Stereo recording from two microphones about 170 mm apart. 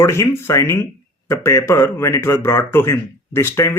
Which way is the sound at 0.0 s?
15° left (ahead or behind).